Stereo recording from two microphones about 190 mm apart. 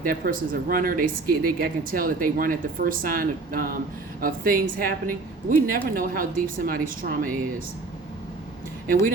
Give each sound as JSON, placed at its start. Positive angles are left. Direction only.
{"t": 0.0, "sound": "speech", "side_deg": -50}